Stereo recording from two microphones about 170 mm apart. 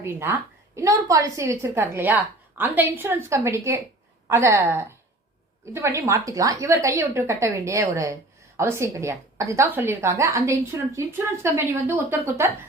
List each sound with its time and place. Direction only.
0.0 s a woman's voice: 15° right (ahead or behind)